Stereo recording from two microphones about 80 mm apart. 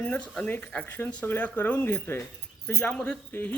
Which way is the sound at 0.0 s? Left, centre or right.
Centre.